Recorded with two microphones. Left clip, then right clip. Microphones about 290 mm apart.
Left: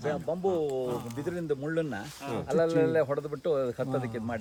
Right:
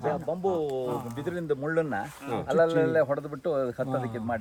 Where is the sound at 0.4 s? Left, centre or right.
Right.